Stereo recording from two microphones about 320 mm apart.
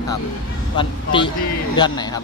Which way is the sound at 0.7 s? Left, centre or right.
Centre.